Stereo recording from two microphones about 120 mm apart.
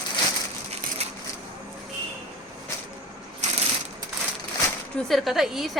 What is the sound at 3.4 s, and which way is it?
Ratchet, 75° right (ahead or behind).